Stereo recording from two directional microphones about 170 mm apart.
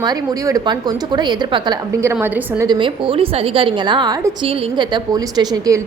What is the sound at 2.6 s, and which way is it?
A woman's voice, 30° right (ahead or behind).